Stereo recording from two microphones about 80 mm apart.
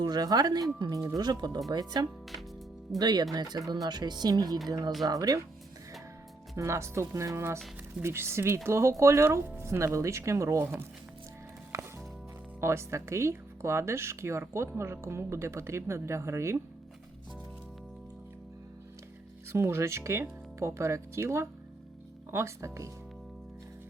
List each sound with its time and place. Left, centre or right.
0.0 s speech: right
6.6 s speech: right
12.5 s speech: right
19.5 s speech: right